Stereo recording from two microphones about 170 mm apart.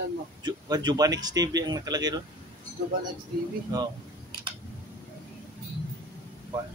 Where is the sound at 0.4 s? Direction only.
25° right (ahead or behind).